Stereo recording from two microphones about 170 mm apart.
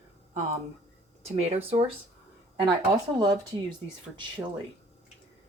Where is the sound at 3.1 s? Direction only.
25° right (ahead or behind).